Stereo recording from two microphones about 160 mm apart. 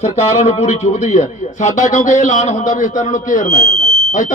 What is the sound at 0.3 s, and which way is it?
A man's voice, 45° left (ahead or behind).